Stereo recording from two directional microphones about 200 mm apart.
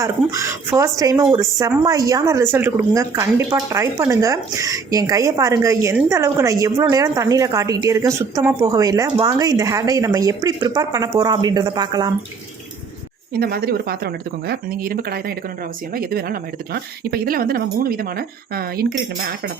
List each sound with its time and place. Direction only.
0.0 s a woman's voice: 15° right (ahead or behind)
13.3 s speech: 50° right (ahead or behind)